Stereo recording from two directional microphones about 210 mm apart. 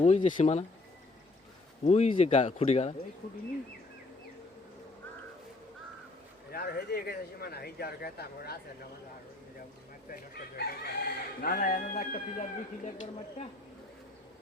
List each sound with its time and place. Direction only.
0.0 s speech: 35° left (ahead or behind)
1.8 s speech: 30° left (ahead or behind)
6.5 s speech: 50° left (ahead or behind)
10.6 s speech: 45° left (ahead or behind)